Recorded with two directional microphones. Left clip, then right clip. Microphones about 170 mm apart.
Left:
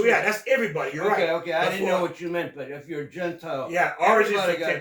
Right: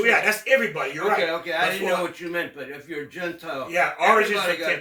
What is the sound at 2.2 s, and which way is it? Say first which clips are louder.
Speech: even; 10° left (ahead or behind).